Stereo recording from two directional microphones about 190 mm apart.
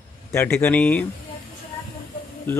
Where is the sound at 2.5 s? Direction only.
10° left (ahead or behind).